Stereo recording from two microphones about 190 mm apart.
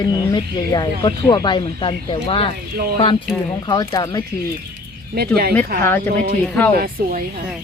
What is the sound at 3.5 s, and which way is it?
Speech, 20° left (ahead or behind).